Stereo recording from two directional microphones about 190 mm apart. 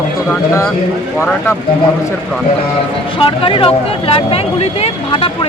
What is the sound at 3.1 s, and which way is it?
Speech, 25° left (ahead or behind).